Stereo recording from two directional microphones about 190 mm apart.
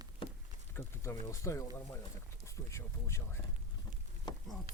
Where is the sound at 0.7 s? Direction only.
15° left (ahead or behind).